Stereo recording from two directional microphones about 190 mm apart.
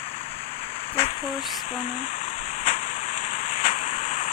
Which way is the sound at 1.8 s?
40° left (ahead or behind).